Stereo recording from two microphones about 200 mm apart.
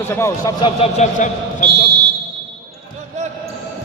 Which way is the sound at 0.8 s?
35° left (ahead or behind).